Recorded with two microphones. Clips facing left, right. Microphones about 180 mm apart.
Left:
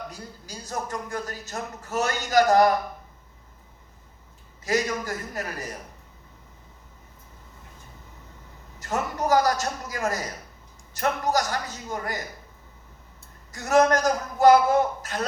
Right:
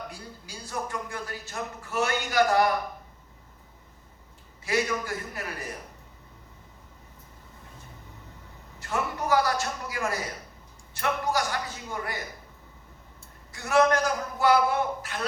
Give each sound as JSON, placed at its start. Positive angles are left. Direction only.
{"t": 0.1, "sound": "a man's voice", "side_deg": 40}
{"t": 4.6, "sound": "a man's voice", "side_deg": 40}
{"t": 8.8, "sound": "a man's voice", "side_deg": 40}
{"t": 13.5, "sound": "a man's voice", "side_deg": 40}